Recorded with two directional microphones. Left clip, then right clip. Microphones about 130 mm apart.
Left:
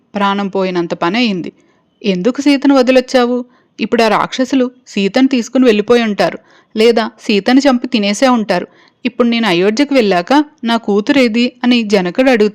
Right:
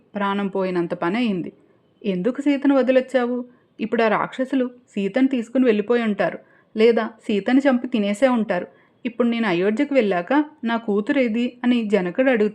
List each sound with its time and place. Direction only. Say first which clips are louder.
0.1 s speech: left 9 dB; 35° left (ahead or behind)